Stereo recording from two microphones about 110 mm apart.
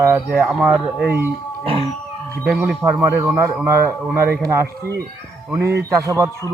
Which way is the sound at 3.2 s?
20° right (ahead or behind).